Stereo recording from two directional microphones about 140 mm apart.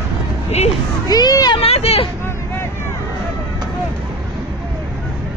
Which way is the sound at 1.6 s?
45° left (ahead or behind).